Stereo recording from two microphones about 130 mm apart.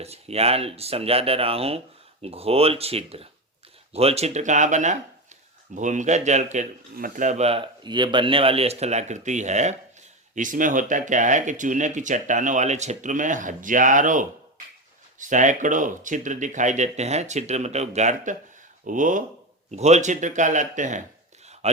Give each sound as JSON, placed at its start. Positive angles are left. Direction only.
{"t": 0.0, "sound": "speech", "side_deg": -50}
{"t": 10.3, "sound": "speech", "side_deg": -85}
{"t": 18.9, "sound": "speech", "side_deg": -85}
{"t": 19.7, "sound": "speech", "side_deg": -60}
{"t": 21.4, "sound": "a sound", "side_deg": -55}